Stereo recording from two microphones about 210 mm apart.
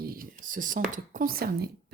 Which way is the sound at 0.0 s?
45° right (ahead or behind).